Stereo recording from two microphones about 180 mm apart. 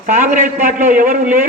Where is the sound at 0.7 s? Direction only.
45° right (ahead or behind).